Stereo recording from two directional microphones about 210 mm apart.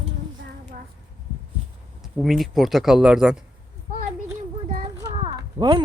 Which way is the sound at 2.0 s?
Centre (ahead or behind).